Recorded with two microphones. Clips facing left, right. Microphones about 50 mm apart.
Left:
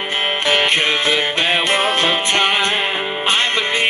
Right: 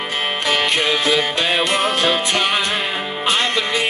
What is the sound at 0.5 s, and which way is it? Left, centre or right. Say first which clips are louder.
Music: left 2 dB; left.